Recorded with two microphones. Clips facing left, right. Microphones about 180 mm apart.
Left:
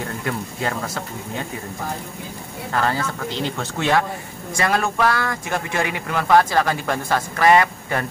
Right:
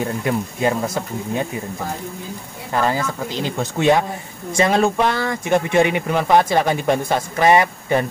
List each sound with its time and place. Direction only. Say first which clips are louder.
0.0 s speech: right 5 dB; 20° right (ahead or behind)
2.7 s speech: right 3 dB; 15° right (ahead or behind)